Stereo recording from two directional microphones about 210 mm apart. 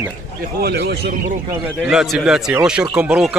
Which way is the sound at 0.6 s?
50° right (ahead or behind).